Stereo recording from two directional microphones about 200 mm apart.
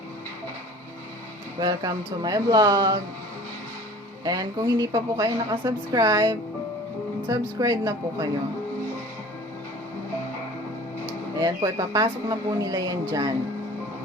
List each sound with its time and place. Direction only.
1.5 s speech: 20° right (ahead or behind)
4.2 s a woman's voice: 20° right (ahead or behind)
11.3 s speech: 20° right (ahead or behind)